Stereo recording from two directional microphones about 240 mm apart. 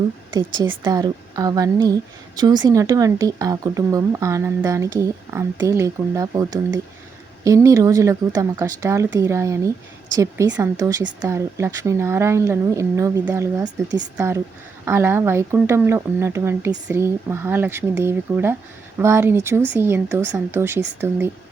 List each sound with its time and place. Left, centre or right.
0.3 s a woman's voice: centre